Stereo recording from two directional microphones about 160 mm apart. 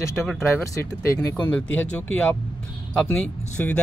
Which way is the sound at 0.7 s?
20° left (ahead or behind).